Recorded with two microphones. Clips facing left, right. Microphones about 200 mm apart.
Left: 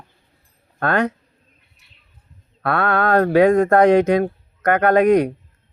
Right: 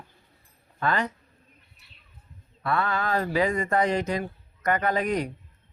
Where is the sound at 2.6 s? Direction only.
70° left (ahead or behind).